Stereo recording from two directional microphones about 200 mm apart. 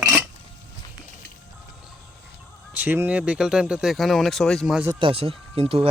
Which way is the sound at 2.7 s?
10° right (ahead or behind).